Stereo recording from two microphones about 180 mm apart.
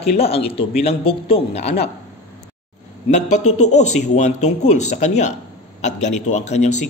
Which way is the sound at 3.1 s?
40° left (ahead or behind).